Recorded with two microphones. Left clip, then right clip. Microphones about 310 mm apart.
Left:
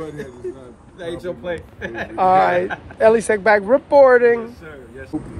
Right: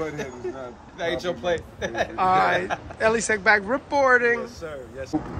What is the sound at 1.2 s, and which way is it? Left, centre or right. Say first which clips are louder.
Speech: right 1 dB; right.